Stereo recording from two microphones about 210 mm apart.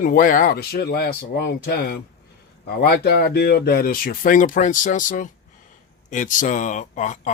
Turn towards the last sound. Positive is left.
turn(degrees=35)  # may be behind; listen again after turning